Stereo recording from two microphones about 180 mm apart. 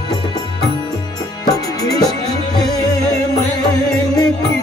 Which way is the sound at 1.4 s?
20° left (ahead or behind).